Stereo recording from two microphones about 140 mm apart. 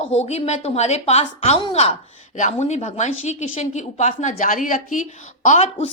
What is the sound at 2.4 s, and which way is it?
A woman's voice, 55° left (ahead or behind).